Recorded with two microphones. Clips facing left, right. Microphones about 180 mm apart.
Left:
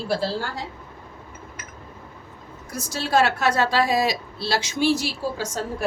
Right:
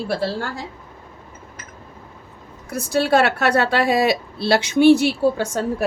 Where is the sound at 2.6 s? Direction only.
60° right (ahead or behind).